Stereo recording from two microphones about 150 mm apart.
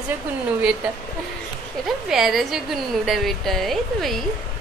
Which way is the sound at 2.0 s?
Centre (ahead or behind).